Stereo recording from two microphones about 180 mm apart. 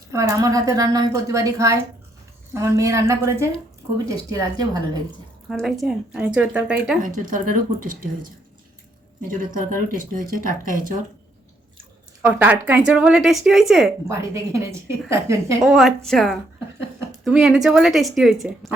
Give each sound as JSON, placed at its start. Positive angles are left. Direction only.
{"t": 0.1, "sound": "a woman's voice", "side_deg": -15}
{"t": 5.5, "sound": "a woman's voice", "side_deg": 0}
{"t": 7.0, "sound": "speech", "side_deg": -45}
{"t": 9.2, "sound": "speech", "side_deg": -50}
{"t": 12.2, "sound": "a woman's voice", "side_deg": -10}
{"t": 14.1, "sound": "a woman's voice", "side_deg": -15}
{"t": 15.6, "sound": "a woman's voice", "side_deg": 0}